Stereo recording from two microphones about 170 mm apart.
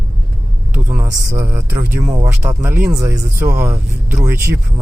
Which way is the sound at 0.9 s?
15° right (ahead or behind).